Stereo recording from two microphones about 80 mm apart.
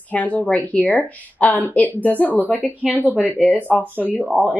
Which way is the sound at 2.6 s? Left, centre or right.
Centre.